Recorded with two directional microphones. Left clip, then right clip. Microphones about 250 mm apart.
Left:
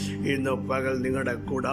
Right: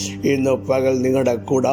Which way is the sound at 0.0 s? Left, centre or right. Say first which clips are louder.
Right 9 dB; centre.